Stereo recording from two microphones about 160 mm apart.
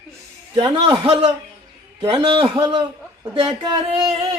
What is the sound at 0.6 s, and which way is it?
A man's voice, 35° right (ahead or behind).